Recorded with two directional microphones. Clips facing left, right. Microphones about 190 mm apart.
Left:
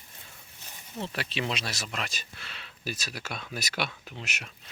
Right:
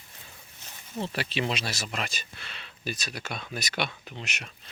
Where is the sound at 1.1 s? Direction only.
Centre (ahead or behind).